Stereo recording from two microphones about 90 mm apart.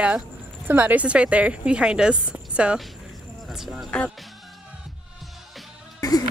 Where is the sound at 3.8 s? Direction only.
15° left (ahead or behind).